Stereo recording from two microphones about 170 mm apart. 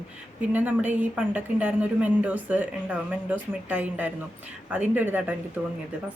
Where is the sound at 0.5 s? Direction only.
10° right (ahead or behind).